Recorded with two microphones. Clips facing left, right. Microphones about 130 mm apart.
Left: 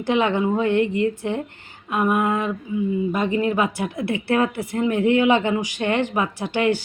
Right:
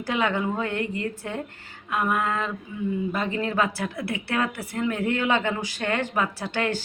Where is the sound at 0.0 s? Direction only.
25° left (ahead or behind).